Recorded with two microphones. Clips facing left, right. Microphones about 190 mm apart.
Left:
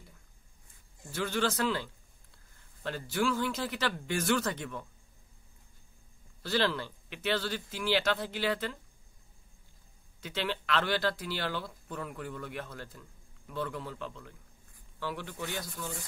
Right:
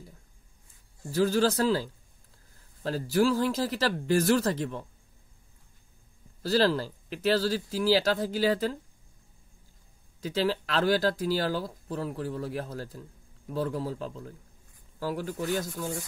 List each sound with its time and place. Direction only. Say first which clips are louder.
1.1 s speech: right 7 dB; 35° right (ahead or behind)
6.4 s speech: right 6 dB; 35° right (ahead or behind)
10.2 s speech: right 7 dB; 40° right (ahead or behind)